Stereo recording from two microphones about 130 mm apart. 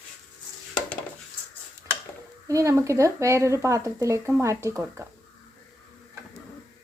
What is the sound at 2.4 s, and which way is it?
Speech, 25° right (ahead or behind).